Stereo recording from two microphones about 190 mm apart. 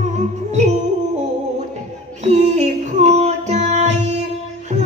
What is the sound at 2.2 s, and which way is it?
Female singing, 35° right (ahead or behind).